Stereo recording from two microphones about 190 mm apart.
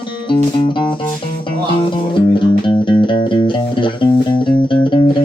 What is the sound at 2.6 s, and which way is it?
Music, 25° left (ahead or behind).